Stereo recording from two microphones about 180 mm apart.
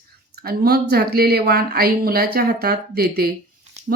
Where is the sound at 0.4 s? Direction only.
60° right (ahead or behind).